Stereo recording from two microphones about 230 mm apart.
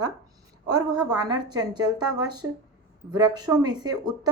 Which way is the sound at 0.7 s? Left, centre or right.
Centre.